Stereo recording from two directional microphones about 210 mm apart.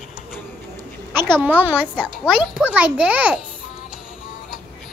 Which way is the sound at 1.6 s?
5° right (ahead or behind).